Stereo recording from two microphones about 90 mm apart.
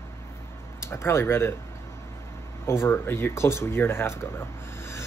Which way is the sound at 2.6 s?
30° left (ahead or behind).